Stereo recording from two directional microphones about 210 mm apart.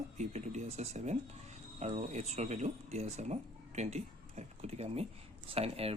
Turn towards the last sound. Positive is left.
turn(degrees=-30)  # may be behind; listen again after turning